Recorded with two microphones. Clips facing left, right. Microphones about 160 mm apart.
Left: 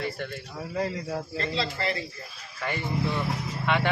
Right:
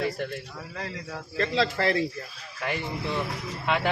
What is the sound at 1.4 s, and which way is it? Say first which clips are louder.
Speech: right 8 dB; 90° right.